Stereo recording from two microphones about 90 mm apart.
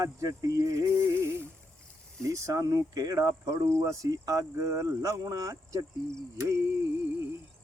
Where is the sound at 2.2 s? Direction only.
35° right (ahead or behind).